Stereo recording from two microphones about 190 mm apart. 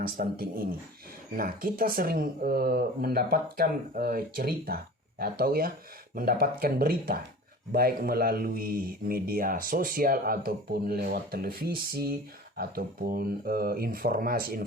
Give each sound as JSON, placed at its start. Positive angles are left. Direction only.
{"t": 0.0, "sound": "speech", "side_deg": -50}